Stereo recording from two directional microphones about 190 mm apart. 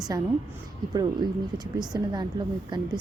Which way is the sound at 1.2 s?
20° right (ahead or behind).